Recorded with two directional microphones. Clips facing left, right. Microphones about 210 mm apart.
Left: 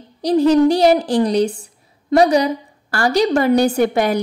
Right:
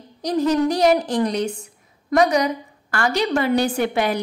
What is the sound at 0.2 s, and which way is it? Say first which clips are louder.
A woman's voice: left 6 dB; 30° left (ahead or behind).